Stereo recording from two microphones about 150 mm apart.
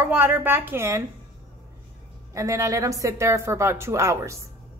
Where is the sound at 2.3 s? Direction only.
20° right (ahead or behind).